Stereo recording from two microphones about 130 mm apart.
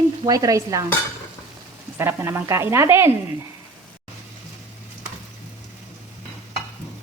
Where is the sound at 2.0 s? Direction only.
20° right (ahead or behind).